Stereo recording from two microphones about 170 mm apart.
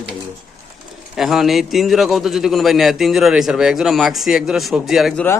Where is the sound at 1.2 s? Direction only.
Centre (ahead or behind).